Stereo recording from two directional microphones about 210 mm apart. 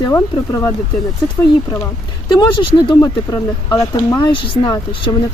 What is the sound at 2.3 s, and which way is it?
Speech, 20° left (ahead or behind).